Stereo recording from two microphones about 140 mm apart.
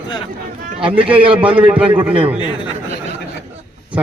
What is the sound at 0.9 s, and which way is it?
Speech, 10° right (ahead or behind).